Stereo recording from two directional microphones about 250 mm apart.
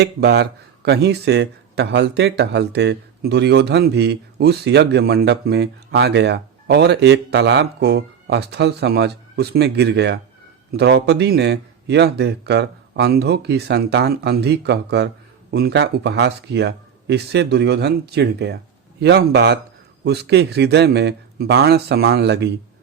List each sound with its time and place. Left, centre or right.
0.0 s speech: right